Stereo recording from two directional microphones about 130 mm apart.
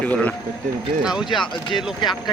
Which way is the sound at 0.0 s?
10° left (ahead or behind).